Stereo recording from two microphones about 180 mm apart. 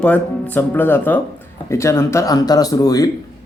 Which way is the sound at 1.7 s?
15° left (ahead or behind).